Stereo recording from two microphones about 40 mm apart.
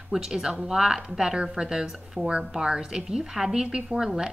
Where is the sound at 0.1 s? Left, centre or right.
Centre.